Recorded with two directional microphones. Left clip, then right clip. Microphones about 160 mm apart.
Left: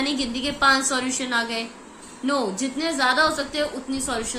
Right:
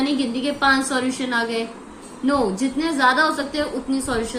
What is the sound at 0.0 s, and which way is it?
A woman's voice, 20° left (ahead or behind).